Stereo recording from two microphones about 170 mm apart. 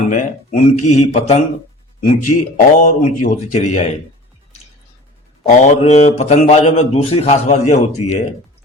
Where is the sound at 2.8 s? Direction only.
45° left (ahead or behind).